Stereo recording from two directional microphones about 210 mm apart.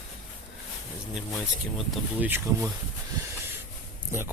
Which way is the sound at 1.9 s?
10° right (ahead or behind).